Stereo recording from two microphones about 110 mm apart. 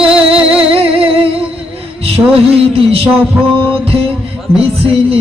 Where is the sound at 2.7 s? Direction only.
60° right (ahead or behind).